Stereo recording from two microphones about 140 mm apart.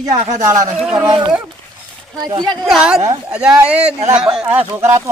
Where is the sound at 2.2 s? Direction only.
25° right (ahead or behind).